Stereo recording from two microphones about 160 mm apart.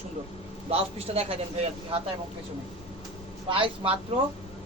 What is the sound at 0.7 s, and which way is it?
A man's voice, 40° right (ahead or behind).